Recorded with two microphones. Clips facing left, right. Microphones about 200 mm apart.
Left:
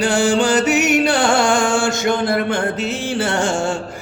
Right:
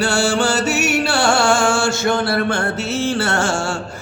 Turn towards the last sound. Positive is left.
turn(degrees=20)  # may be behind; listen again after turning